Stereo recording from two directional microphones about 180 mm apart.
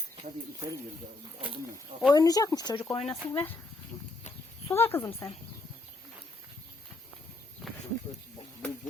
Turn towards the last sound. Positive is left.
turn(degrees=0)  # may be behind; listen again after turning